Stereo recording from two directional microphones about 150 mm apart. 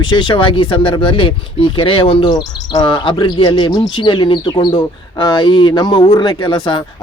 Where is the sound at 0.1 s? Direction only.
30° left (ahead or behind).